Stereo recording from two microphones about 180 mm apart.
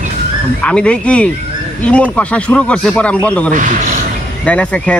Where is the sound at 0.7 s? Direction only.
5° left (ahead or behind).